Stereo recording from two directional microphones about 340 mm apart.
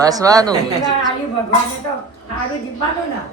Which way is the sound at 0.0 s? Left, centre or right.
Centre.